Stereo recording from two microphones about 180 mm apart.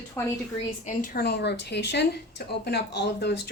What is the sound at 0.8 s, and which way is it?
Speech, 50° left (ahead or behind).